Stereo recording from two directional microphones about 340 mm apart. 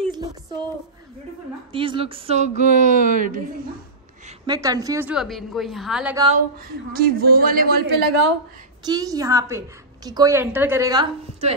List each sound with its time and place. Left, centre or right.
0.1 s a sound: centre
1.7 s speech: centre
4.3 s a woman's voice: centre
6.2 s speech: right
8.8 s a woman's voice: centre